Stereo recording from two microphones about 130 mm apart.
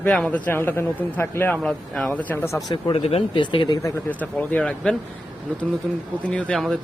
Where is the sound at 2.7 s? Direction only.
35° left (ahead or behind).